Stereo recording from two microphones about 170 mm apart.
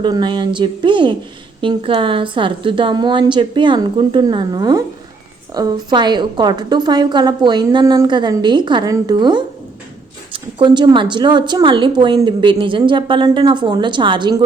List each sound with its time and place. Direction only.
0.0 s a woman's voice: 25° right (ahead or behind)